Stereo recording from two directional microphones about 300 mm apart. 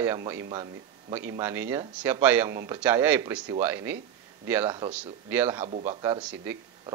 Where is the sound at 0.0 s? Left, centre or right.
Centre.